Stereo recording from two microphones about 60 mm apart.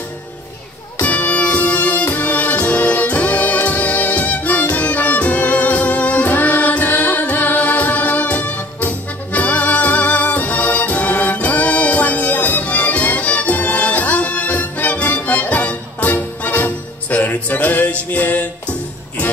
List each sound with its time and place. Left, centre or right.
1.0 s music: left